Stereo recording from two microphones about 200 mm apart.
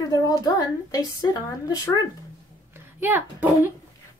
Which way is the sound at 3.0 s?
10° right (ahead or behind).